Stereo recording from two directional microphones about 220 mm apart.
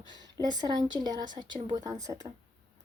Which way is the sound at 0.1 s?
20° right (ahead or behind).